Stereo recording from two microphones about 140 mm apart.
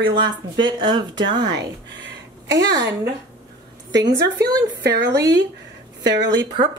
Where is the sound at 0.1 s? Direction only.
35° right (ahead or behind).